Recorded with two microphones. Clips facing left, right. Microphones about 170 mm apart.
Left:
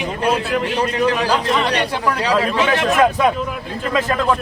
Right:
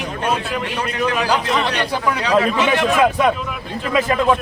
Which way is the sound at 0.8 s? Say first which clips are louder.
Left 1 dB; 35° left (ahead or behind).